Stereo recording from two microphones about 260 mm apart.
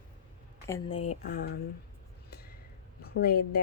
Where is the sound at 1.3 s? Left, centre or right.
Left.